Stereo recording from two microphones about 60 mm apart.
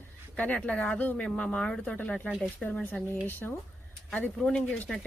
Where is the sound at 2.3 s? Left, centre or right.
Left.